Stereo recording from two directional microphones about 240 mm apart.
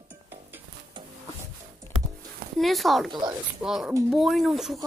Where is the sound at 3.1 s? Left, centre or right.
Centre.